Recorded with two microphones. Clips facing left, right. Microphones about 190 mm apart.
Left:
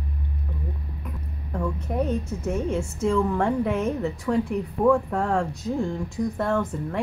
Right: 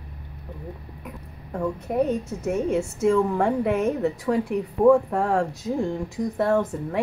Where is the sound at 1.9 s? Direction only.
Centre (ahead or behind).